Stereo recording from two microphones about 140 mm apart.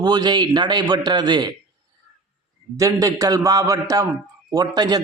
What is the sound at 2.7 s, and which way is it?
A man's voice, 25° right (ahead or behind).